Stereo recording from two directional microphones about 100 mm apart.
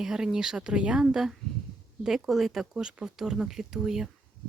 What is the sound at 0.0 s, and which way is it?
Speech, 5° right (ahead or behind).